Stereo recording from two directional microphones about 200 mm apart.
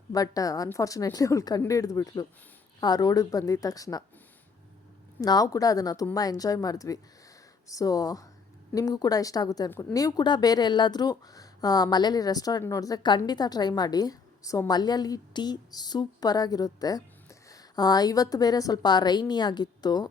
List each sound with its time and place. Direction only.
0.1 s a woman's voice: 20° left (ahead or behind)
5.2 s a woman's voice: 20° left (ahead or behind)